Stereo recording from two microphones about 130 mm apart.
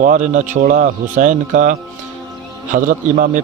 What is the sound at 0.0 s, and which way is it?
Speech, 75° right (ahead or behind).